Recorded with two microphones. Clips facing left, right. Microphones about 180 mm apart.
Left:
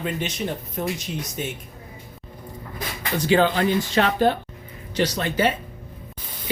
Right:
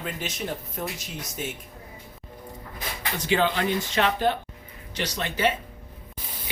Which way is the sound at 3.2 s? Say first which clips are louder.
Left 5 dB; 35° left (ahead or behind).